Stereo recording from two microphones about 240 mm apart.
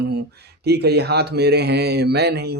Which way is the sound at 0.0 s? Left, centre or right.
Right.